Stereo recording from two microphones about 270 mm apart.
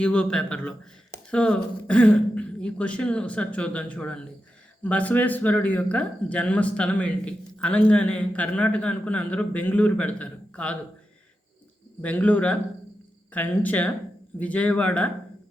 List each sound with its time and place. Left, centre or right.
0.0 s speech: centre
12.0 s speech: centre